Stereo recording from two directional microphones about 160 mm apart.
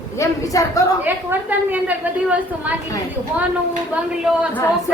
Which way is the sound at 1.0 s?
10° right (ahead or behind).